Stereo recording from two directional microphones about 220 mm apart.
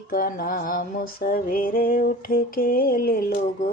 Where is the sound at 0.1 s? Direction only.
40° left (ahead or behind).